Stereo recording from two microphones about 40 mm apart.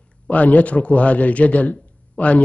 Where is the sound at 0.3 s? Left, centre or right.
Left.